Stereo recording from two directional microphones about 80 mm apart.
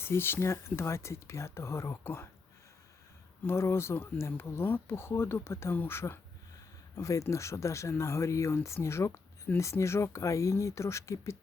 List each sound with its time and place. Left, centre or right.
0.0 s speech: left
3.4 s speech: left